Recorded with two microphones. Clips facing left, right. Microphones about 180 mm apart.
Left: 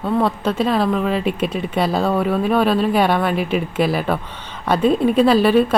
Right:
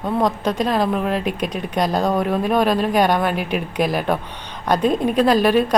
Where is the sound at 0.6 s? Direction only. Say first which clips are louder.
Left 2 dB; 5° left (ahead or behind).